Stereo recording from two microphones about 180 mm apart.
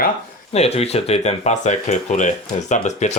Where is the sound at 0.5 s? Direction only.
35° left (ahead or behind).